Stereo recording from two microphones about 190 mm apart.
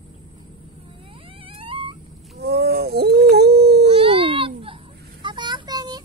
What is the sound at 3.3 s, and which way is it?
Dog, 60° right (ahead or behind).